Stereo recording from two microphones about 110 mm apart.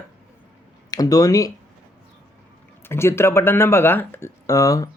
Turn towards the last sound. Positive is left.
turn(degrees=30)  # may be behind; listen again after turning